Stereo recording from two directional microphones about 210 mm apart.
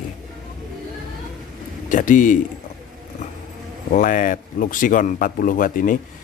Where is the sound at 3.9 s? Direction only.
40° left (ahead or behind).